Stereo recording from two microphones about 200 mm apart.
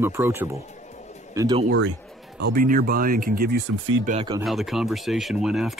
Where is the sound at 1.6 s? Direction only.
75° right (ahead or behind).